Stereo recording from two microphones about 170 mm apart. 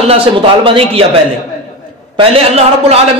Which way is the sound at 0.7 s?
30° right (ahead or behind).